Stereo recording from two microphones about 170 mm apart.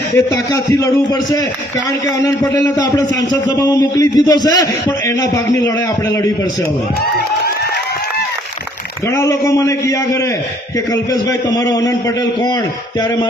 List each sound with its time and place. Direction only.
0.1 s a man's voice: 20° left (ahead or behind)
9.0 s a man's voice: 15° left (ahead or behind)